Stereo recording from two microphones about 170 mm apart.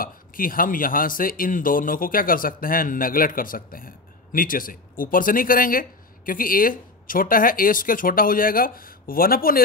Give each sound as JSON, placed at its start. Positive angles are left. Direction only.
{"t": 0.0, "sound": "speech", "side_deg": 55}